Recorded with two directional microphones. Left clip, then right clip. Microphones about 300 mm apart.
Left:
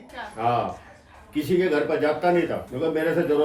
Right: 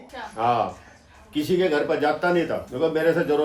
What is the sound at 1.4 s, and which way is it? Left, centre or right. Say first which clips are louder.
Speech: even; centre.